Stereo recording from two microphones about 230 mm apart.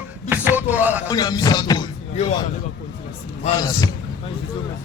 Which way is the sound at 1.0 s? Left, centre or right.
Centre.